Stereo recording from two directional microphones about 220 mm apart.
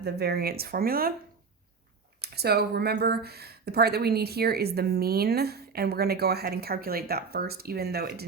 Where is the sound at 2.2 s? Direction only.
45° right (ahead or behind).